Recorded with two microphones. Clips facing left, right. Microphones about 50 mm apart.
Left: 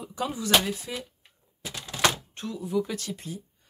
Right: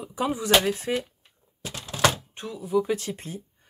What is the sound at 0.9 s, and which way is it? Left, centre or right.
Speech, right.